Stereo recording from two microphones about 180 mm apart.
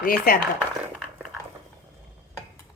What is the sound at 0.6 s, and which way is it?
Speech, 10° right (ahead or behind).